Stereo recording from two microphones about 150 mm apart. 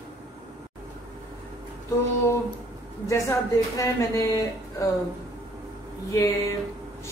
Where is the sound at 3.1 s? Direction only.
20° left (ahead or behind).